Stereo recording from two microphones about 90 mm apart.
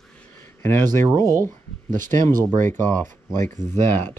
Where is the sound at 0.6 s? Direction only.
25° left (ahead or behind).